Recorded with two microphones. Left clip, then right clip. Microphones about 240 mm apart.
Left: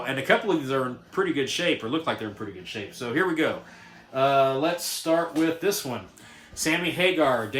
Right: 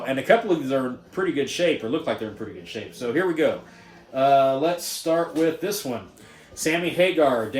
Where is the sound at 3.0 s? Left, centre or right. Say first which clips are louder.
Right 2 dB; centre.